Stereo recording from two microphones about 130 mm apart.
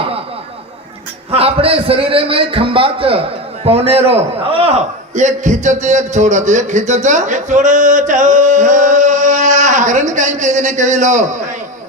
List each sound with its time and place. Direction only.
1.3 s a man's voice: 50° right (ahead or behind)
5.1 s a man's voice: 70° right (ahead or behind)